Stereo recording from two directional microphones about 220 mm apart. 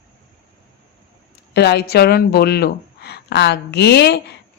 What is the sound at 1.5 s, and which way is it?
Speech, 50° left (ahead or behind).